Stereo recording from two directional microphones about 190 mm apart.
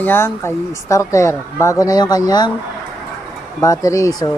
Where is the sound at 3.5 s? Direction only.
15° left (ahead or behind).